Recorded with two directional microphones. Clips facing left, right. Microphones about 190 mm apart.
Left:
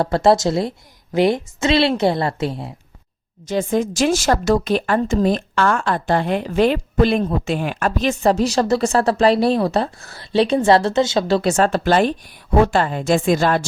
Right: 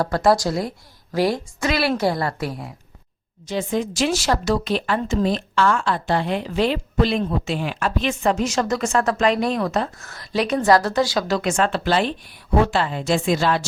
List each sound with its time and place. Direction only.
0.0 s a woman's voice: 25° left (ahead or behind)
3.4 s speech: 45° left (ahead or behind)